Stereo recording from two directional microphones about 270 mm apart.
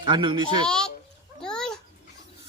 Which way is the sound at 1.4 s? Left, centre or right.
Centre.